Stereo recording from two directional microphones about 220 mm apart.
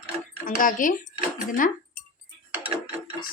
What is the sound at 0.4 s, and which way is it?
Speech, 40° left (ahead or behind).